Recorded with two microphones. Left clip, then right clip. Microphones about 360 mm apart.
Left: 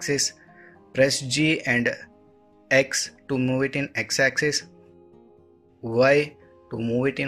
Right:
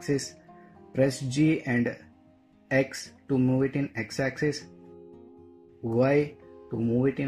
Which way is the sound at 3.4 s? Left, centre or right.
Left.